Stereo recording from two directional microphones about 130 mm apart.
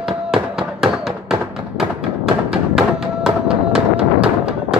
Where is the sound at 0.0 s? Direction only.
5° right (ahead or behind).